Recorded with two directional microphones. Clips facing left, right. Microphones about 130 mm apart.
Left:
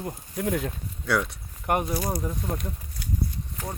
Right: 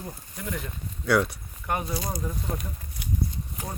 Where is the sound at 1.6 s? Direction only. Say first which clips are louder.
Left 4 dB; 30° left (ahead or behind).